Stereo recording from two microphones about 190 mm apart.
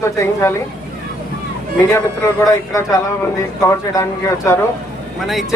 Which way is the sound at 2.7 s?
15° left (ahead or behind).